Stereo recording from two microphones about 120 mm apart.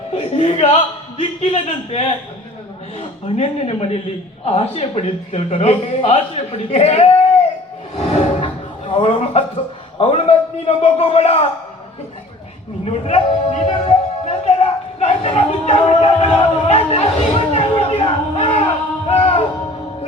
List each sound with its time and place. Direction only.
0.1 s a man's voice: 50° left (ahead or behind)
7.9 s a sound: 55° left (ahead or behind)
8.9 s chuckle: 50° left (ahead or behind)
10.0 s speech: 55° left (ahead or behind)
12.8 s speech: 60° left (ahead or behind)
13.7 s music: 65° left (ahead or behind)